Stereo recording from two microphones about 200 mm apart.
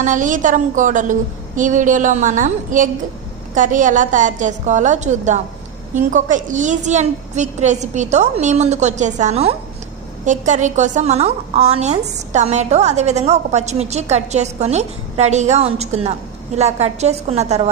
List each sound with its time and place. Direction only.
0.0 s a woman's voice: 40° right (ahead or behind)